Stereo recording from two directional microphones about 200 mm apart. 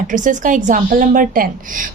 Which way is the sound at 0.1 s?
40° right (ahead or behind).